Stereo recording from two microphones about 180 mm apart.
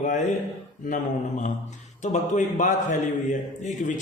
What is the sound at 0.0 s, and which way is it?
Speech, 45° left (ahead or behind).